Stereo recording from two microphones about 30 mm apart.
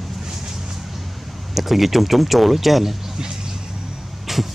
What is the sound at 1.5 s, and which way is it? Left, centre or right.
Speech, centre.